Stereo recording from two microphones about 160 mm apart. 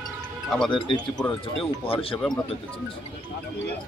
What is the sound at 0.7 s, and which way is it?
Speech, 30° left (ahead or behind).